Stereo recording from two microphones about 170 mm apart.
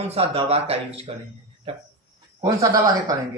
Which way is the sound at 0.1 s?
35° right (ahead or behind).